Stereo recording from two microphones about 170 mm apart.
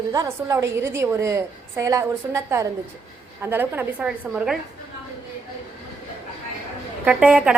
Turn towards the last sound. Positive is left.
turn(degrees=-5)  # may be behind; listen again after turning